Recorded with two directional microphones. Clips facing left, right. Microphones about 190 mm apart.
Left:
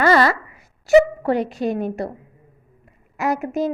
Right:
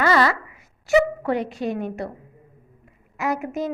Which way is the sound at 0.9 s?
35° left (ahead or behind).